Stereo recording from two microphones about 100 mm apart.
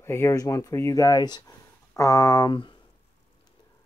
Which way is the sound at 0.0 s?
25° left (ahead or behind).